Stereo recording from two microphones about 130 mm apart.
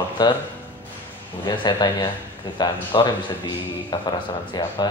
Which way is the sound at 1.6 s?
35° left (ahead or behind).